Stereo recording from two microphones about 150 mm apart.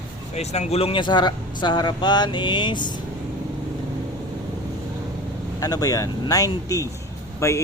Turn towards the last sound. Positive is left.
turn(degrees=20)  # may be behind; listen again after turning